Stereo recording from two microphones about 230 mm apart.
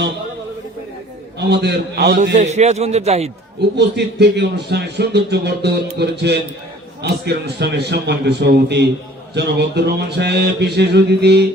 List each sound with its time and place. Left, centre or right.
1.4 s a man's voice: right
3.8 s a man's voice: right